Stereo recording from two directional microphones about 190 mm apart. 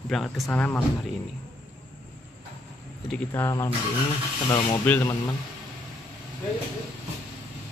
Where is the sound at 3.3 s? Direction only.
15° left (ahead or behind).